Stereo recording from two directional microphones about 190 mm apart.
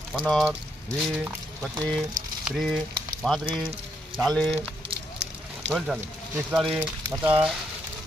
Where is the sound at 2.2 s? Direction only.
90° right.